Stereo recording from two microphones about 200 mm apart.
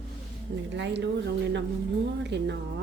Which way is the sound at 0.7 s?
60° right (ahead or behind).